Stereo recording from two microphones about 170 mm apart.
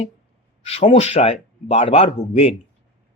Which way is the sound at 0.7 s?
35° left (ahead or behind).